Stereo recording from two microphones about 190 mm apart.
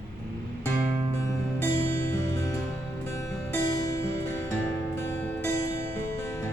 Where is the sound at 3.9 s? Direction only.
15° left (ahead or behind).